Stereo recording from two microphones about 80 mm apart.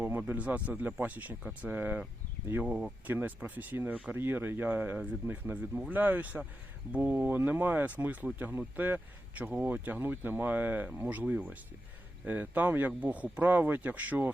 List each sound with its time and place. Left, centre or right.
0.0 s speech: right